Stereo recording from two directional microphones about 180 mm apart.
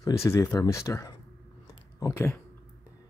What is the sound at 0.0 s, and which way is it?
Speech, 15° left (ahead or behind).